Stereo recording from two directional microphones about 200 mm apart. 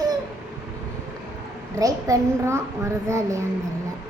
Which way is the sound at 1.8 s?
15° right (ahead or behind).